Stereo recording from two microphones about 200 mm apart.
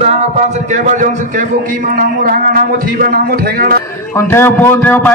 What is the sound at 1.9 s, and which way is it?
A man's voice, 45° right (ahead or behind).